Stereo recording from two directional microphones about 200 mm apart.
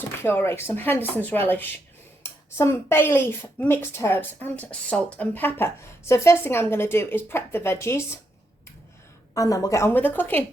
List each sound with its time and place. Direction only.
0.2 s speech: 10° left (ahead or behind)
9.3 s speech: 15° left (ahead or behind)